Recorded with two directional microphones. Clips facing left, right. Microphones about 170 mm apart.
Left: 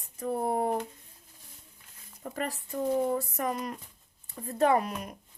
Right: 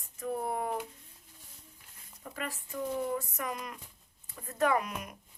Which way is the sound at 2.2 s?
40° left (ahead or behind).